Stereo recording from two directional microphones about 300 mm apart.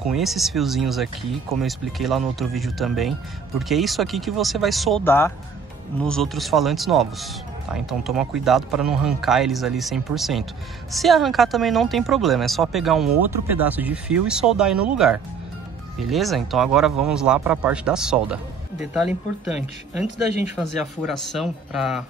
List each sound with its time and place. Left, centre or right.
0.0 s speech: centre
20.5 s speech: centre